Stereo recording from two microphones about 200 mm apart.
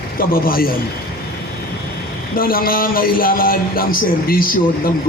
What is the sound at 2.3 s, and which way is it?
Speech, 45° left (ahead or behind).